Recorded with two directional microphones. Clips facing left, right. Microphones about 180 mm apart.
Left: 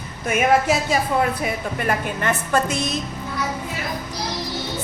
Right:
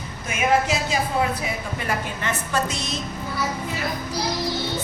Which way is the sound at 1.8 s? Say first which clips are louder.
Left 5 dB; 55° left (ahead or behind).